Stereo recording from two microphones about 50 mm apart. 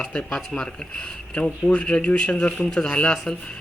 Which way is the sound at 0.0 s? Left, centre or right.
Left.